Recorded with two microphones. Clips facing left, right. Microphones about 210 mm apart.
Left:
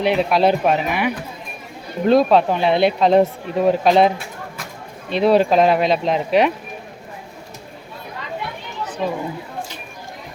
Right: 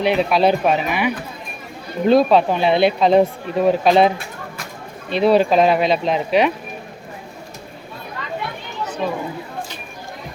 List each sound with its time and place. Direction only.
0.0 s speech: centre (ahead or behind)
9.0 s speech: 5° left (ahead or behind)